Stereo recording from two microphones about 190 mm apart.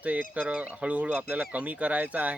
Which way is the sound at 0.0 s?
10° right (ahead or behind).